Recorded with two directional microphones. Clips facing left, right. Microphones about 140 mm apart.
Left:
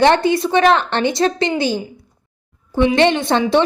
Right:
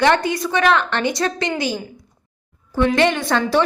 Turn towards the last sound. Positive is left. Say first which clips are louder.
# left 3 dB
turn(degrees=25)  # may be behind; listen again after turning